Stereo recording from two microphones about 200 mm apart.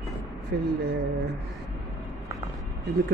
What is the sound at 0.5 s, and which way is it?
Speech, 55° right (ahead or behind).